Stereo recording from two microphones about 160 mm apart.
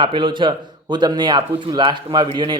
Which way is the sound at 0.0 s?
30° right (ahead or behind).